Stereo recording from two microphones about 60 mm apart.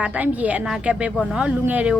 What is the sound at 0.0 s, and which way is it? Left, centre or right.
A woman's voice, right.